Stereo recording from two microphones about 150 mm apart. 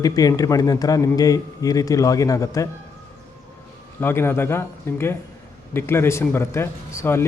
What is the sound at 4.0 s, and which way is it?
A man's voice, 15° left (ahead or behind).